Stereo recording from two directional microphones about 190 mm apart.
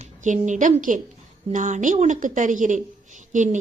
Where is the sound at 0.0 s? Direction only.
40° right (ahead or behind).